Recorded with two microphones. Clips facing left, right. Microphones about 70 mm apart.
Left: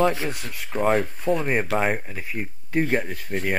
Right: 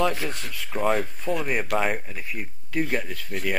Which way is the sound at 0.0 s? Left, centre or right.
Left.